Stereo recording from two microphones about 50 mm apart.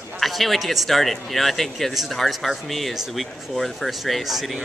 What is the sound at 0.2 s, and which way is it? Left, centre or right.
Speech, centre.